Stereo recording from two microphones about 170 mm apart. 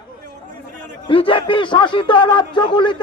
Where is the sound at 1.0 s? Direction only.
30° left (ahead or behind).